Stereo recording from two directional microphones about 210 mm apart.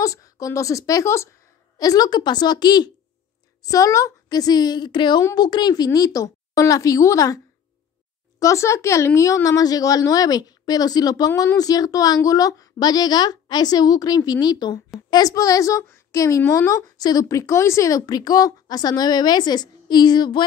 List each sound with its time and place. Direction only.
0.0 s a woman's voice: 15° left (ahead or behind)
8.4 s a woman's voice: 15° left (ahead or behind)